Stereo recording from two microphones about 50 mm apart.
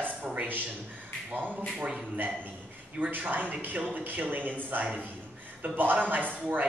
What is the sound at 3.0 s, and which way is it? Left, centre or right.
A man's voice, right.